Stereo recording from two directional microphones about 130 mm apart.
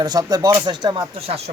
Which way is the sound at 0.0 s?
30° right (ahead or behind).